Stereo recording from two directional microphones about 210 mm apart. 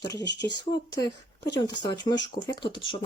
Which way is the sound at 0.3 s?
55° left (ahead or behind).